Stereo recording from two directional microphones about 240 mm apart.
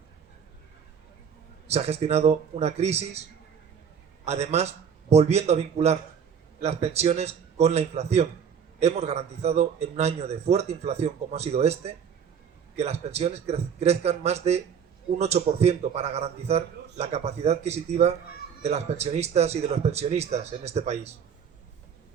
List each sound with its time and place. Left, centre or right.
1.6 s a man's voice: right
4.3 s a man's voice: right